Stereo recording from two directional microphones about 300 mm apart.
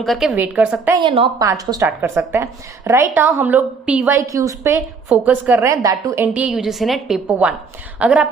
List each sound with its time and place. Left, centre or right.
0.0 s a woman's voice: centre
1.0 s a woman's voice: centre